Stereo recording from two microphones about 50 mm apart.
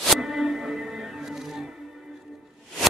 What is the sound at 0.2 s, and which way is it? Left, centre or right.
Music, centre.